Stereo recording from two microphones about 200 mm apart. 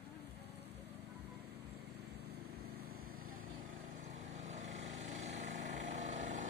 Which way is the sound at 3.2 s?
90° right.